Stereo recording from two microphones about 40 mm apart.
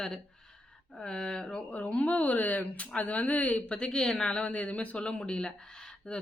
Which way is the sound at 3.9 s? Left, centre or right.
Centre.